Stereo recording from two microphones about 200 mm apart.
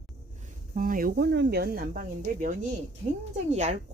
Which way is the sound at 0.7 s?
40° right (ahead or behind).